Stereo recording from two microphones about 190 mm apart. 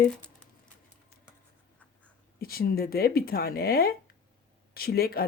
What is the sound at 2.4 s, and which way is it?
Speech, 50° left (ahead or behind).